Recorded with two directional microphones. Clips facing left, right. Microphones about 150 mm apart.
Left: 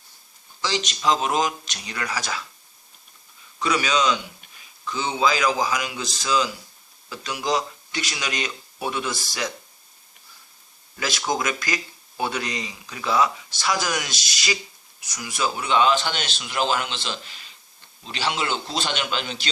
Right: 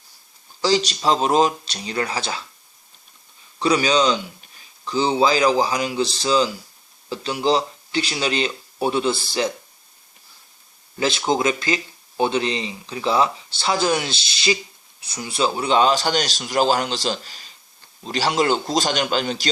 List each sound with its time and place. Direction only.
0.6 s speech: 35° right (ahead or behind)
3.6 s speech: 35° right (ahead or behind)
10.9 s speech: 25° right (ahead or behind)